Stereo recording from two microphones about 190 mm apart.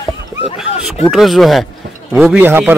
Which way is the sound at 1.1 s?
Centre (ahead or behind).